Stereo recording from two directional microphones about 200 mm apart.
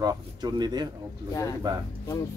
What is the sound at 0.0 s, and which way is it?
Speech, 20° right (ahead or behind).